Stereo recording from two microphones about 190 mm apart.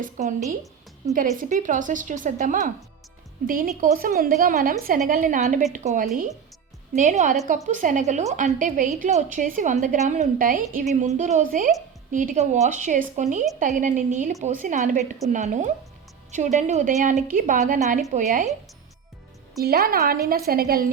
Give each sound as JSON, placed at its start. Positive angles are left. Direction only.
{"t": 0.0, "sound": "a woman's voice", "side_deg": -40}
{"t": 19.6, "sound": "a woman's voice", "side_deg": -55}